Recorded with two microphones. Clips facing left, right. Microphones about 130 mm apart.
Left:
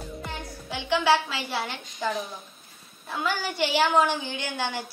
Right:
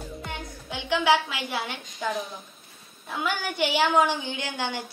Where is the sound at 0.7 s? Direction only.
20° right (ahead or behind).